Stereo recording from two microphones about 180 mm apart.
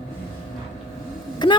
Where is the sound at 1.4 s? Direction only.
25° left (ahead or behind).